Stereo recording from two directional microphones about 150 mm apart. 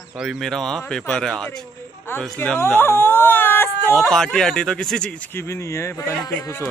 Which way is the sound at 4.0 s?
Centre (ahead or behind).